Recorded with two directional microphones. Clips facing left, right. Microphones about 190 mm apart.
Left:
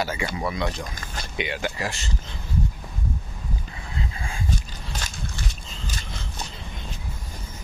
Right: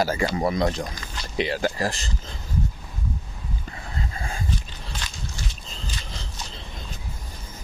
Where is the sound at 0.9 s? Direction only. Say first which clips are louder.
Left 1 dB; 50° left (ahead or behind).